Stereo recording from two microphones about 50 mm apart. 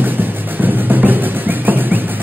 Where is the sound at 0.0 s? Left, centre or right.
Right.